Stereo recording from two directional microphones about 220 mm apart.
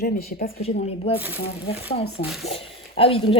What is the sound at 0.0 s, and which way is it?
Speech, 40° left (ahead or behind).